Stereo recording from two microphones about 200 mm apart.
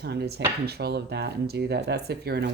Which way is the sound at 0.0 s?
55° right (ahead or behind).